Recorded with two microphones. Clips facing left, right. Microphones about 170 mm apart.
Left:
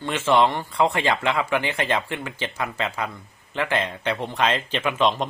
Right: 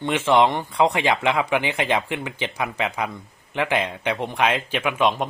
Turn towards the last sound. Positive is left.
turn(degrees=-10)  # may be behind; listen again after turning